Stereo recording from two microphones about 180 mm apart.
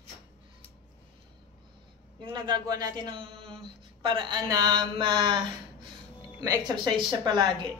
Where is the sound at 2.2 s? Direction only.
25° right (ahead or behind).